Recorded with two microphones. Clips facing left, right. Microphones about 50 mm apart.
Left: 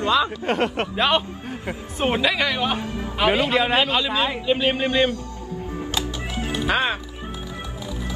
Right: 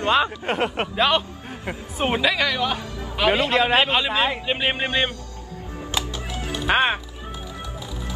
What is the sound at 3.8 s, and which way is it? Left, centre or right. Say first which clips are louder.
Speech: right 1 dB; right.